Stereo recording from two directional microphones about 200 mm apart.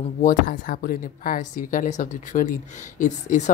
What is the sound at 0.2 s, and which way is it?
A woman's voice, 45° left (ahead or behind).